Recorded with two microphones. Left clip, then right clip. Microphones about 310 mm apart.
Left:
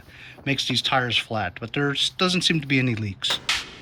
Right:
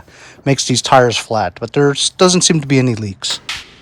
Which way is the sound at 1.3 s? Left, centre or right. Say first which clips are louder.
Right 11 dB; centre.